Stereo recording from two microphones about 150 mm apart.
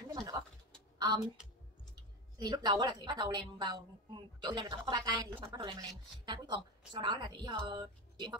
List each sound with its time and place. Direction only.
0.1 s pigeon: 25° right (ahead or behind)
0.9 s a sound: 30° right (ahead or behind)
2.3 s a woman's voice: 30° right (ahead or behind)